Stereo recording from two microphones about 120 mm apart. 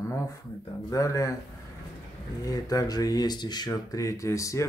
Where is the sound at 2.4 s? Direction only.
30° left (ahead or behind).